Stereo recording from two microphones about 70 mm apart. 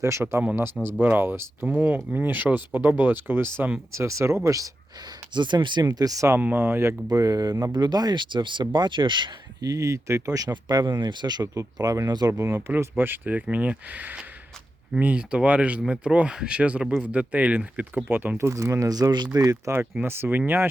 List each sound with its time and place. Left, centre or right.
0.0 s speech: right
1.6 s speech: centre
3.9 s speech: right
5.3 s speech: right
6.3 s speech: right
7.1 s speech: right
7.7 s speech: right
10.7 s speech: right
11.0 s speech: right
11.5 s speech: right
12.3 s speech: right
18.3 s speech: right
20.0 s speech: right